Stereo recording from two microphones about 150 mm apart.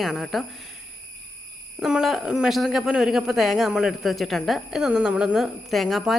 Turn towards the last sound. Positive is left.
turn(degrees=0)  # may be behind; listen again after turning